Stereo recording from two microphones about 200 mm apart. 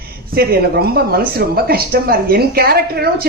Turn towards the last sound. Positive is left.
turn(degrees=-50)  # may be behind; listen again after turning